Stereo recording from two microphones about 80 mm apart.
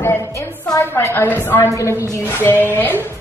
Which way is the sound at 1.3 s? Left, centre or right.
Left.